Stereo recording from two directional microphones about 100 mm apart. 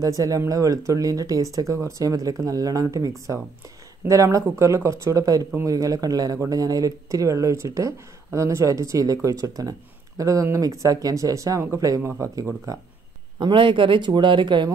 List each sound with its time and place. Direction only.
0.0 s speech: 35° right (ahead or behind)
13.4 s speech: 55° right (ahead or behind)